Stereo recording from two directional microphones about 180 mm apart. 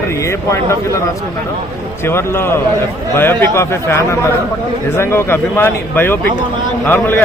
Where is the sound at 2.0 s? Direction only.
15° left (ahead or behind).